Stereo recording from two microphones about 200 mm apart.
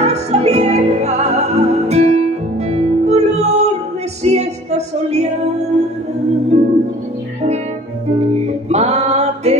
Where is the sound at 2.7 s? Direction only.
35° right (ahead or behind).